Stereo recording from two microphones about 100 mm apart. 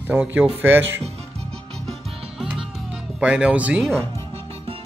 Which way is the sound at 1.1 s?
90° right.